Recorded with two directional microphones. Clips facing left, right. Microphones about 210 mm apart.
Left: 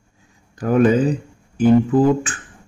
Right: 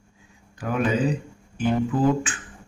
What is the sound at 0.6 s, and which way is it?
Speech, 45° left (ahead or behind).